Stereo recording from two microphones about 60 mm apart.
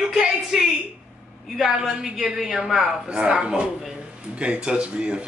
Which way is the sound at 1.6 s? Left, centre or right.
Centre.